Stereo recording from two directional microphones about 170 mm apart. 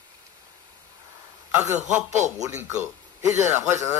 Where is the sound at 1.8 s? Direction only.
45° right (ahead or behind).